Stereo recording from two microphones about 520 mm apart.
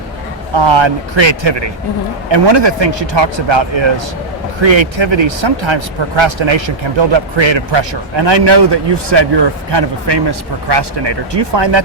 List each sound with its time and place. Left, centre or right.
0.5 s speech: right